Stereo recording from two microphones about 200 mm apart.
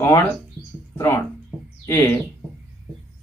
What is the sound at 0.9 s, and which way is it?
Speech, 10° left (ahead or behind).